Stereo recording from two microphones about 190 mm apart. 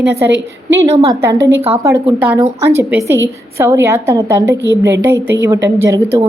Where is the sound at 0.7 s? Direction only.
15° right (ahead or behind).